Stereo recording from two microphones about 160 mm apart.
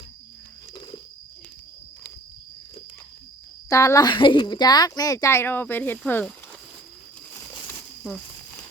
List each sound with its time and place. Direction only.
3.7 s speech: 20° left (ahead or behind)